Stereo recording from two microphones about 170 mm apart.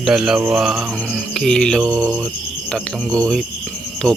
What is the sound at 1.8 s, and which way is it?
Cricket, 20° right (ahead or behind).